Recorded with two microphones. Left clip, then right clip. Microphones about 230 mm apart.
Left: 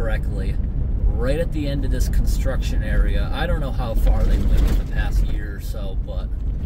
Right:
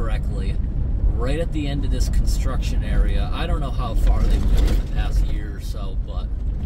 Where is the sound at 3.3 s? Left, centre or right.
Centre.